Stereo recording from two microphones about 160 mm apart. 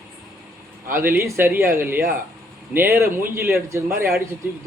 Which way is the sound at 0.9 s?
15° right (ahead or behind).